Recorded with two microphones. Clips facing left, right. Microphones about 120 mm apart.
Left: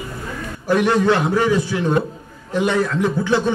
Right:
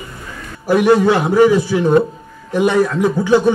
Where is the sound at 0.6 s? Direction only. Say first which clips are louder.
Right 4 dB; 10° right (ahead or behind).